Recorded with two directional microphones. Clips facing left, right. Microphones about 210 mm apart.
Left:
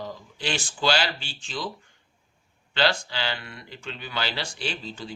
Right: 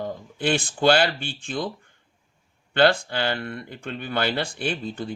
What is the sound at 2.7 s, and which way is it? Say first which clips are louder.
Speech: right 6 dB; 55° right (ahead or behind).